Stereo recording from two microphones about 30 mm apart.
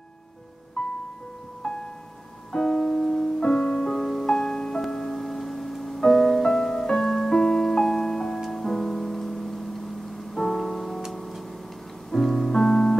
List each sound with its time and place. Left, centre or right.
0.8 s music: left
2.5 s music: centre